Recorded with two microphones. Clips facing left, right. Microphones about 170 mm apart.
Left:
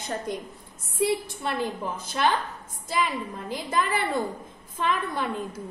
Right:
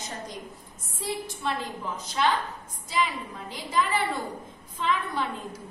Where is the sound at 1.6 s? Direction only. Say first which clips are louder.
Left 5 dB; 55° left (ahead or behind).